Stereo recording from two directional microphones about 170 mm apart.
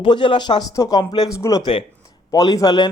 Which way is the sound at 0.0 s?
30° left (ahead or behind).